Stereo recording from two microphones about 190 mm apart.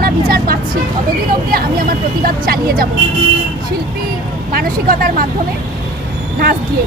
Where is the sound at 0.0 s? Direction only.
55° right (ahead or behind).